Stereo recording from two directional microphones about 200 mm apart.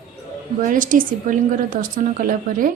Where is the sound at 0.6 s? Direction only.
40° right (ahead or behind).